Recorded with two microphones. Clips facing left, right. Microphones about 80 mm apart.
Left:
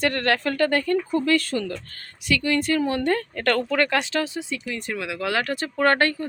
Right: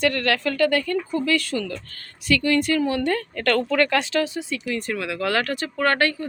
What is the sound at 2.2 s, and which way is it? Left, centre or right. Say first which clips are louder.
A woman's voice: right 2 dB; centre.